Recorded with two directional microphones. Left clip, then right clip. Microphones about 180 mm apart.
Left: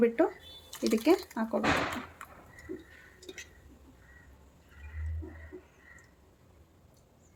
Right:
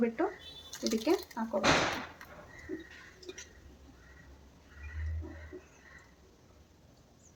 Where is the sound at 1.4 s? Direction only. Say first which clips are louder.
Left 3 dB; 70° left (ahead or behind).